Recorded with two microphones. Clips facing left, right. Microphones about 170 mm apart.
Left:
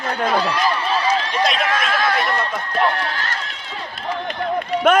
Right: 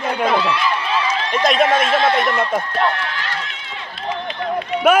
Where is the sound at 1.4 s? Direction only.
45° right (ahead or behind).